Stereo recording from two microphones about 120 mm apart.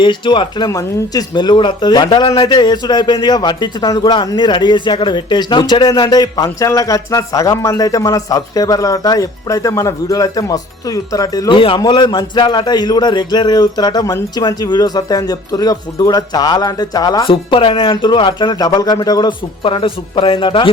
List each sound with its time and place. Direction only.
0.0 s speech: 40° left (ahead or behind)
17.2 s speech: 45° left (ahead or behind)
19.6 s a man's voice: 45° left (ahead or behind)